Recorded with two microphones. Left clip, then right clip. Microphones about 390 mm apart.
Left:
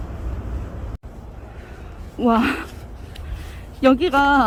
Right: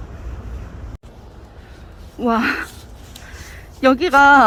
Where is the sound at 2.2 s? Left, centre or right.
Centre.